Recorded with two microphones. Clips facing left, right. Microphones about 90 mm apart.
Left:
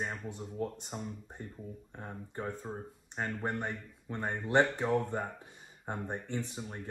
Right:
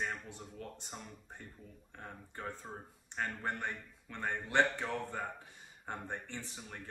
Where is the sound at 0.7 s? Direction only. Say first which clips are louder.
Left 7 dB; 20° left (ahead or behind).